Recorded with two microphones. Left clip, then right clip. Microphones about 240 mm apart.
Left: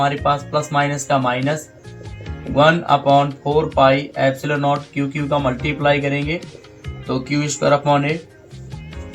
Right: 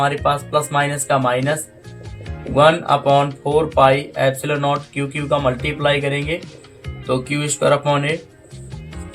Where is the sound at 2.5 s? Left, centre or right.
Right.